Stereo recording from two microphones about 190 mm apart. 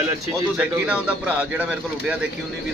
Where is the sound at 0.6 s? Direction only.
5° right (ahead or behind).